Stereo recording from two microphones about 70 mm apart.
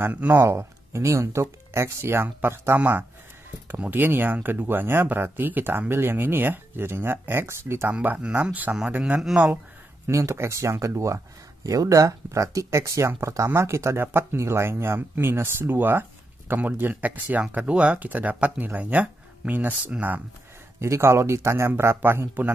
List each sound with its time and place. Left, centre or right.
0.3 s speech: right
2.8 s speech: right
7.9 s speech: right
9.3 s speech: centre
10.0 s speech: right
20.8 s speech: right